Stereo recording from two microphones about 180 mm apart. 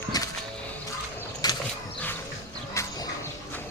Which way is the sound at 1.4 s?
20° left (ahead or behind).